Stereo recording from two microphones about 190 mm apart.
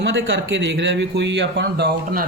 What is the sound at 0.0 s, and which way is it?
A man's voice, 70° right (ahead or behind).